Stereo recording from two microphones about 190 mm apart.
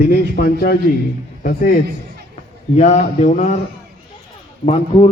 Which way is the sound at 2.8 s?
40° left (ahead or behind).